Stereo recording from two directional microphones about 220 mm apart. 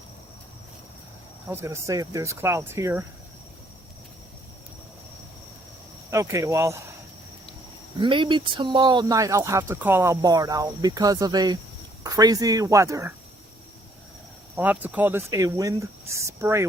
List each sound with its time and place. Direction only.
1.5 s speech: 15° right (ahead or behind)
6.1 s speech: 15° right (ahead or behind)
7.9 s speech: 20° right (ahead or behind)
14.5 s speech: 5° right (ahead or behind)